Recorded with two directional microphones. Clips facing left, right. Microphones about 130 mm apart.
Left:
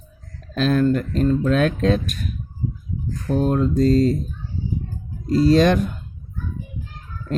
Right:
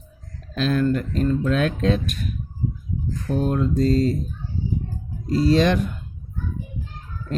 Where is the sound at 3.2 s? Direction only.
40° left (ahead or behind).